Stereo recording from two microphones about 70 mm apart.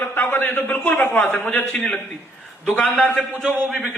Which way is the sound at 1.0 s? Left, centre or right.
Left.